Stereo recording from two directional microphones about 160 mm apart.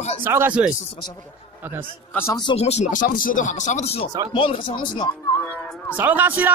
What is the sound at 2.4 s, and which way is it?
A man's voice, 40° left (ahead or behind).